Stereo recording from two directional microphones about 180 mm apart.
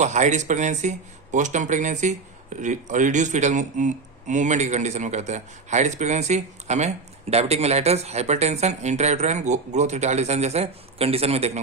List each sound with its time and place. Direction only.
0.0 s speech: 40° right (ahead or behind)